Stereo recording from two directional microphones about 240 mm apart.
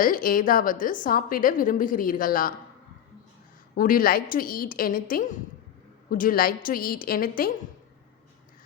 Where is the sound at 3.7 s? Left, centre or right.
Left.